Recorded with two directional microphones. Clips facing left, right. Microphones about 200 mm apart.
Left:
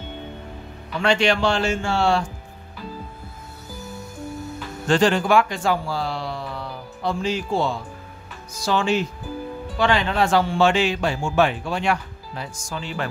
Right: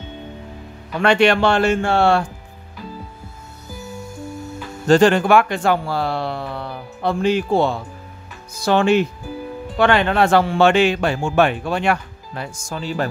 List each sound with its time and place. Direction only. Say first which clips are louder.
1.0 s speech: right 5 dB; 60° right (ahead or behind)
4.8 s speech: right 6 dB; 40° right (ahead or behind)
5.1 s speech: right 4 dB; 60° right (ahead or behind); by 13.1 s 40° right (ahead or behind)